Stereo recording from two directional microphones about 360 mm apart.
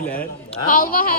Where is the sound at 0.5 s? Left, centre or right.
Left.